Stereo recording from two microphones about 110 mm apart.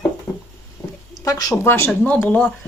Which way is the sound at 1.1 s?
35° left (ahead or behind).